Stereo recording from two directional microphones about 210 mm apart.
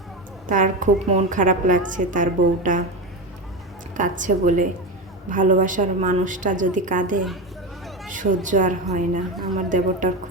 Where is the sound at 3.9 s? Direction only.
40° right (ahead or behind).